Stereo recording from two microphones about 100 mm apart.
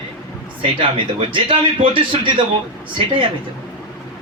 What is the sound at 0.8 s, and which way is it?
A man's voice, 60° right (ahead or behind).